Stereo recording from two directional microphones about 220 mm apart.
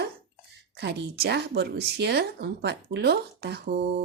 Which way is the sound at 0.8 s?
50° right (ahead or behind).